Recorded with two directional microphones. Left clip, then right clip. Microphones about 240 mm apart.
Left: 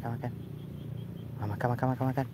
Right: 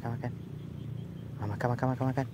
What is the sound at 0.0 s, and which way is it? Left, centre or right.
Vehicle, centre.